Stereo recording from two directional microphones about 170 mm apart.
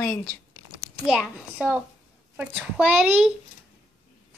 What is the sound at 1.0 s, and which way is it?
A woman's voice, 5° right (ahead or behind).